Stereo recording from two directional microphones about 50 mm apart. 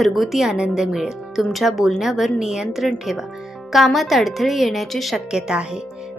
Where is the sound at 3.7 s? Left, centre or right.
Centre.